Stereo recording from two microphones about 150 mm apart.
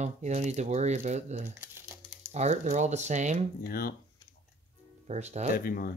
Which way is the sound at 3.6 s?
80° left.